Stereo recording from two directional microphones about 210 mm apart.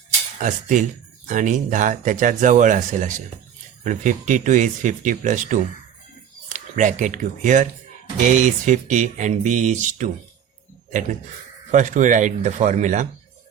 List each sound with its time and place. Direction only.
0.3 s speech: 35° right (ahead or behind)
11.7 s speech: 35° right (ahead or behind)